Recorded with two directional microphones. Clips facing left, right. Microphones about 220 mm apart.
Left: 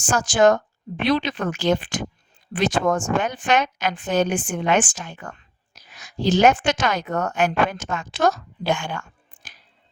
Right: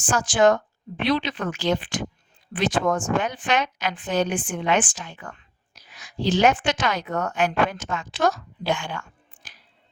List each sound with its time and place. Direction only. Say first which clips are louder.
0.0 s speech: left 2 dB; 45° left (ahead or behind)